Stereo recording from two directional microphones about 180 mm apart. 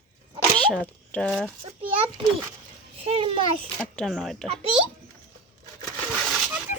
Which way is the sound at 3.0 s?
35° right (ahead or behind).